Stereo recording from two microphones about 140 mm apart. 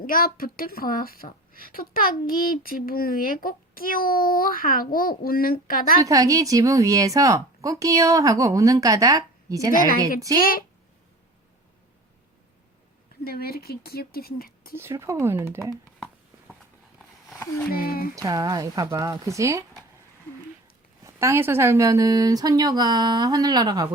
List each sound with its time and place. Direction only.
0.0 s a woman's voice: 90° left
6.0 s a woman's voice: 25° right (ahead or behind)
10.3 s a woman's voice: 90° left
13.2 s a woman's voice: 90° left
14.8 s a woman's voice: 20° right (ahead or behind)
17.7 s a woman's voice: 90° left
18.1 s a woman's voice: 25° right (ahead or behind)
21.0 s a woman's voice: 20° right (ahead or behind)